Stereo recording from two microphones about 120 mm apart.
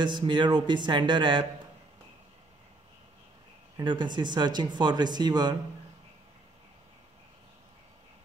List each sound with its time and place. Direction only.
0.0 s speech: 40° right (ahead or behind)
3.7 s speech: 40° right (ahead or behind)